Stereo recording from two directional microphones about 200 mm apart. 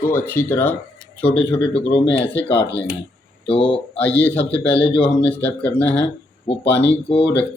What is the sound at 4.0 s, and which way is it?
Speech, 5° left (ahead or behind).